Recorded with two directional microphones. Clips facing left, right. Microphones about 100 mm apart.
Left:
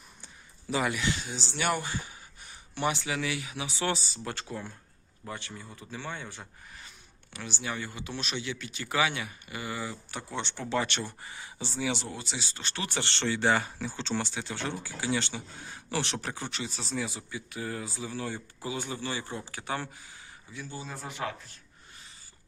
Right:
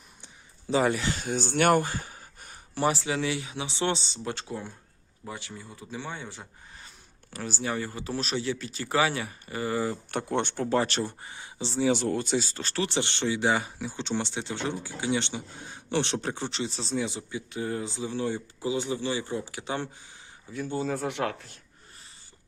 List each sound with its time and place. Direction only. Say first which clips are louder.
0.7 s speech: right 4 dB; 35° right (ahead or behind); by 6.5 s 15° right (ahead or behind)
6.7 s speech: right 1 dB; 35° right (ahead or behind)
11.2 s speech: right 3 dB; 25° right (ahead or behind)
11.9 s speech: right 12 dB; 50° right (ahead or behind)
12.9 s speech: right 3 dB; 15° right (ahead or behind)
20.5 s speech: right 11 dB; 55° right (ahead or behind)